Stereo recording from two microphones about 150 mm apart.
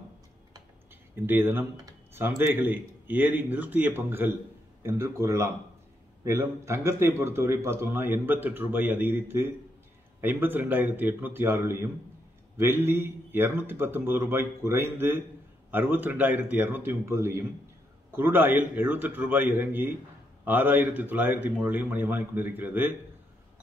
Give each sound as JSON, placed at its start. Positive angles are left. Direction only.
{"t": 1.2, "sound": "a man's voice", "side_deg": -15}